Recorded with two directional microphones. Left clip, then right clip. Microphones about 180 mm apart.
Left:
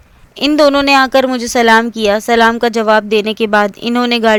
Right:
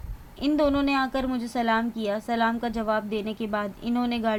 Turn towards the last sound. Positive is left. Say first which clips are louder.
# left 15 dB
turn(degrees=55)  # may be behind; listen again after turning